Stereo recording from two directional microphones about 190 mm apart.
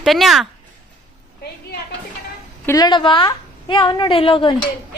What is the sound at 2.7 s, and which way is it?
A woman's voice, 20° left (ahead or behind).